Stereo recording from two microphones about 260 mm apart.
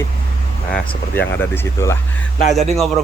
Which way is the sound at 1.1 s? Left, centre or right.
Centre.